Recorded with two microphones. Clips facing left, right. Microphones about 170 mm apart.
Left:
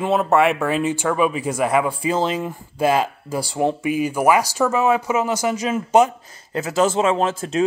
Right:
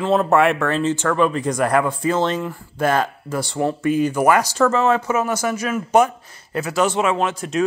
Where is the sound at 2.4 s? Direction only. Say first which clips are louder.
Even; 20° left (ahead or behind).